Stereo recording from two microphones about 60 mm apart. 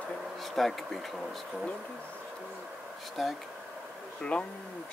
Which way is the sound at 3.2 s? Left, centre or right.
Centre.